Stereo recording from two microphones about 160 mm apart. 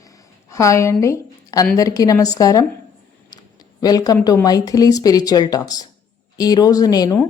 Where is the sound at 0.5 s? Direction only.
20° left (ahead or behind).